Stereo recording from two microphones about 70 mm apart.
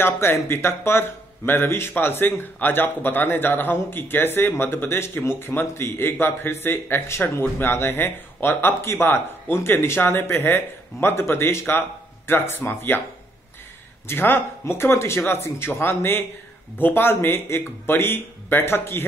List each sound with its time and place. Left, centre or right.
0.0 s speech: left
14.0 s speech: left